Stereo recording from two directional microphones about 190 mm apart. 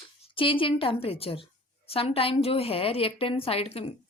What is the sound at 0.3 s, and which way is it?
A woman's voice, 30° left (ahead or behind).